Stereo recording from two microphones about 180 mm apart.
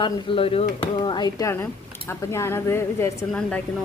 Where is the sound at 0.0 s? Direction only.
30° left (ahead or behind).